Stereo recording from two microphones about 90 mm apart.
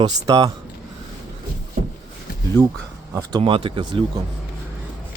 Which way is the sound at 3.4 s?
75° right (ahead or behind).